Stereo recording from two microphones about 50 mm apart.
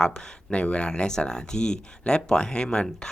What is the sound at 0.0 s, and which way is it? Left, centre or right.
Speech, centre.